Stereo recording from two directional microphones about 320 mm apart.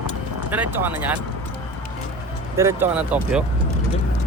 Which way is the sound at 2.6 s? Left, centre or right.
Centre.